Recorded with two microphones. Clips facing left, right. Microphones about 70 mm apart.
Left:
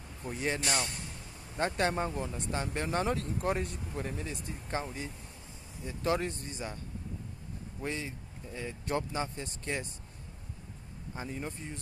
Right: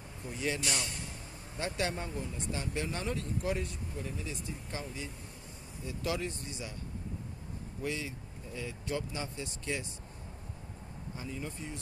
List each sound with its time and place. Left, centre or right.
0.3 s a man's voice: left
7.8 s speech: left
11.2 s speech: left